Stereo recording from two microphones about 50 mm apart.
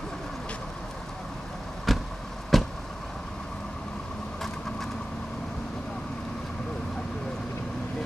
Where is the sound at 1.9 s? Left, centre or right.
Centre.